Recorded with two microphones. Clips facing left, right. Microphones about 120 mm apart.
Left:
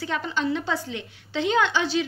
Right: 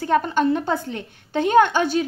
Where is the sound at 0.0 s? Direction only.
50° right (ahead or behind).